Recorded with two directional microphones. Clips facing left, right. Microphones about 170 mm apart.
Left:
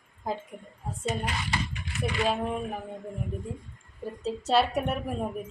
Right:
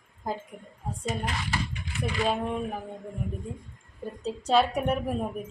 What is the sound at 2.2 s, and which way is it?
Speech, centre (ahead or behind).